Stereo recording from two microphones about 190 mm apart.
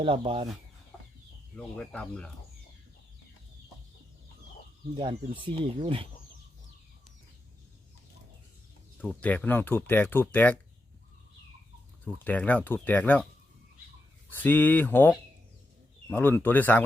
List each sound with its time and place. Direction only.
0.0 s speech: 30° right (ahead or behind)
1.5 s speech: 5° left (ahead or behind)
4.9 s speech: 25° right (ahead or behind)
9.0 s speech: 5° left (ahead or behind)
12.0 s speech: 10° left (ahead or behind)
14.3 s speech: 10° left (ahead or behind)